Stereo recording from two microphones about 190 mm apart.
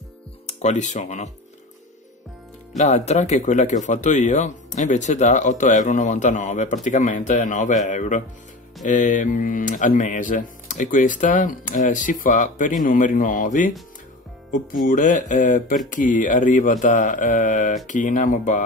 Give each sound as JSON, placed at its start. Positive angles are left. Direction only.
{"t": 0.5, "sound": "speech", "side_deg": 35}
{"t": 2.8, "sound": "speech", "side_deg": 35}
{"t": 14.9, "sound": "speech", "side_deg": 45}